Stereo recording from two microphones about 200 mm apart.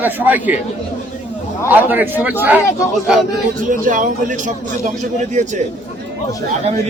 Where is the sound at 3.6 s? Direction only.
40° right (ahead or behind).